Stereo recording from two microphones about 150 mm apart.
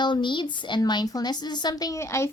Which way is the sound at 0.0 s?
30° left (ahead or behind).